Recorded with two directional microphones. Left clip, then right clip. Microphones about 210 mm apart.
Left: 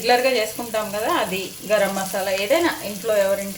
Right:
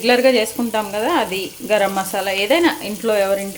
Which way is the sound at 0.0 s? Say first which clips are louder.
Right 4 dB; 35° right (ahead or behind).